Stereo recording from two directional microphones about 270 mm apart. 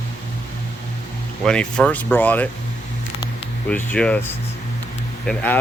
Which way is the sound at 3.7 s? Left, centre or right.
Centre.